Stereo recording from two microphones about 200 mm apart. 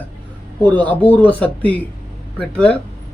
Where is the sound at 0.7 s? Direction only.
10° left (ahead or behind).